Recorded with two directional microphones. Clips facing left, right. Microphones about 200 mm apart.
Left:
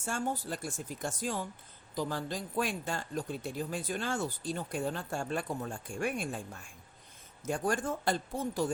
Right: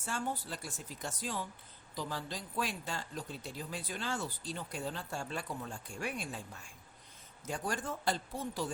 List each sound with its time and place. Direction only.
0.0 s speech: 45° left (ahead or behind)